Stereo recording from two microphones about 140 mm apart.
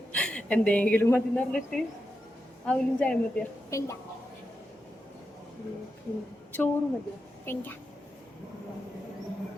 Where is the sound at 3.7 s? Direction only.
20° left (ahead or behind).